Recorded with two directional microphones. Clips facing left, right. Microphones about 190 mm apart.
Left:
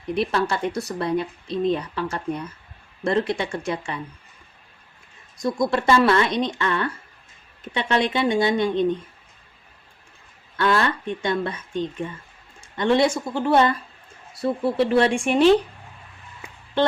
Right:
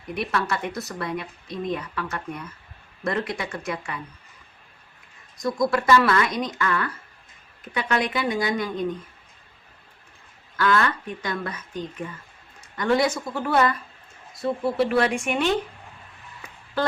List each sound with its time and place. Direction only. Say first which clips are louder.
0.1 s speech: left 4 dB; 30° left (ahead or behind)
5.4 s speech: left 1 dB; 25° left (ahead or behind)
10.6 s speech: left 1 dB; 25° left (ahead or behind)